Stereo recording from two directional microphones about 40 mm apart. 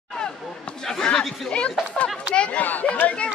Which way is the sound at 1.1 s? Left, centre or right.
Centre.